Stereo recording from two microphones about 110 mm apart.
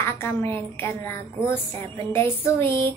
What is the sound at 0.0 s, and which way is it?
Speech, 20° left (ahead or behind).